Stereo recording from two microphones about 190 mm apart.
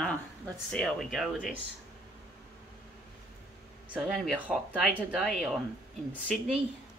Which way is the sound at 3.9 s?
Centre (ahead or behind).